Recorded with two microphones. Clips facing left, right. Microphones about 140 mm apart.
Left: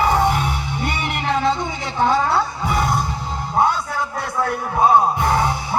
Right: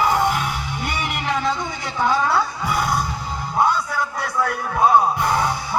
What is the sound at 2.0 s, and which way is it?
Music, 25° left (ahead or behind).